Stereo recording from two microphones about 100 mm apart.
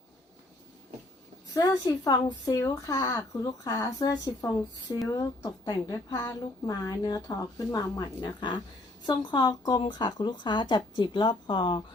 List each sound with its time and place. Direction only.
1.5 s a woman's voice: 40° left (ahead or behind)